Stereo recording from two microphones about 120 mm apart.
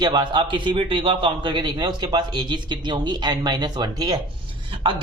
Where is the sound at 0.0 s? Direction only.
35° right (ahead or behind).